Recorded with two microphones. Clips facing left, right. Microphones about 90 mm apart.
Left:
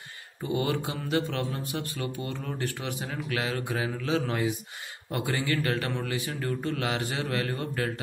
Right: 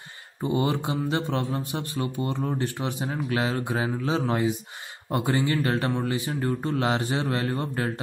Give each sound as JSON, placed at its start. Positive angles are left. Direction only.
{"t": 0.4, "sound": "mantra", "side_deg": -30}